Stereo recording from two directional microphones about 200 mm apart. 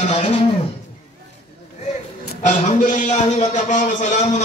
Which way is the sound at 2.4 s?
35° left (ahead or behind).